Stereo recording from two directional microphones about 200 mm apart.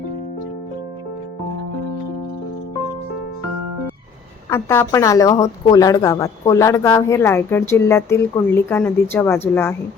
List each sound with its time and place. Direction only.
4.4 s speech: 15° left (ahead or behind)